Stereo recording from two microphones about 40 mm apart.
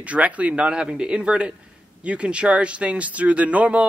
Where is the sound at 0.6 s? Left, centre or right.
Right.